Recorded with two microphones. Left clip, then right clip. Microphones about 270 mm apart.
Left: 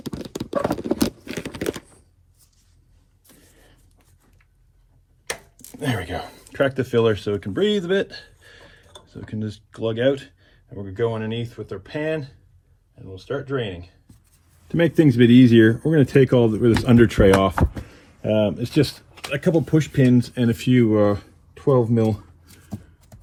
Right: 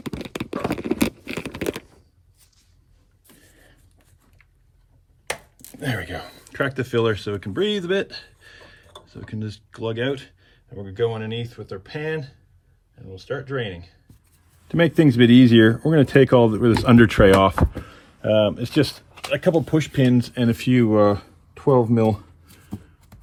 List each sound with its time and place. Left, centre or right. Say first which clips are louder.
0.1 s a sound: left 4 dB; centre
5.8 s speech: left 2 dB; centre
14.7 s speech: even; right